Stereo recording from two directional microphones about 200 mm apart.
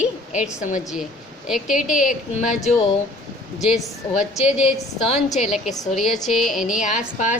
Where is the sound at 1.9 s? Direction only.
40° left (ahead or behind).